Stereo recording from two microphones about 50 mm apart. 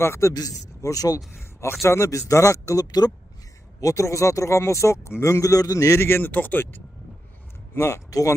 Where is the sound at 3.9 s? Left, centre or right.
Left.